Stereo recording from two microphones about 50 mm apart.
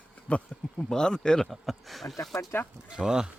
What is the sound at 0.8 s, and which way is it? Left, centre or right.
Speech, centre.